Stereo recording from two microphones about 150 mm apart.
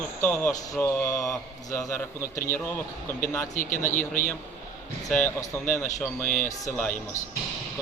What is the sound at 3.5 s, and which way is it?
Speech, 60° left (ahead or behind).